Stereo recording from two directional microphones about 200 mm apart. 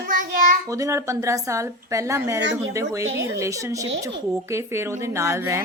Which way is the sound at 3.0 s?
75° right (ahead or behind).